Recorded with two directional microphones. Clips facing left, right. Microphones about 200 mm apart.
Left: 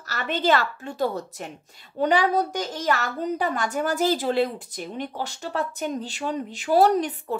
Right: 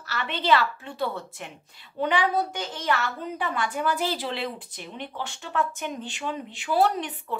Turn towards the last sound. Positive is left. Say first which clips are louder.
# left 6 dB
turn(degrees=40)  # may be behind; listen again after turning